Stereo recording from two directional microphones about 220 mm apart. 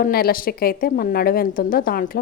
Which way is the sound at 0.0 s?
40° left (ahead or behind).